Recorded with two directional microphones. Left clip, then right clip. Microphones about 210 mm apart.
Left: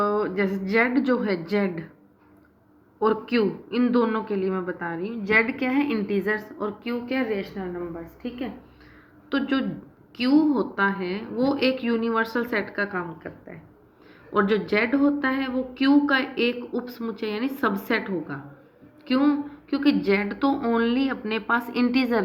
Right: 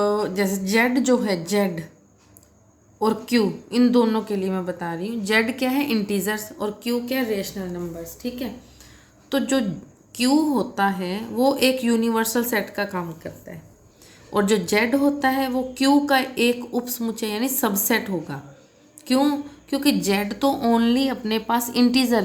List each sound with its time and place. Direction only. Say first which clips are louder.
0.0 s speech: right 2 dB; 45° right (ahead or behind)
3.0 s speech: right 1 dB; 45° right (ahead or behind)
9.3 s a woman's voice: right 3 dB; 55° right (ahead or behind); by 22.2 s 40° right (ahead or behind)